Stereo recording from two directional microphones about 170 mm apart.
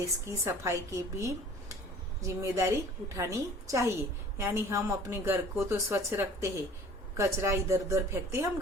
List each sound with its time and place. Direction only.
0.3 s speech: 15° right (ahead or behind)